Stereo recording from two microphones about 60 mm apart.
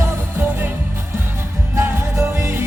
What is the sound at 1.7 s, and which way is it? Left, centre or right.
Music, right.